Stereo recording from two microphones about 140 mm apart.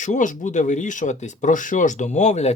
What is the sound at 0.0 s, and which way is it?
Speech, 60° left (ahead or behind).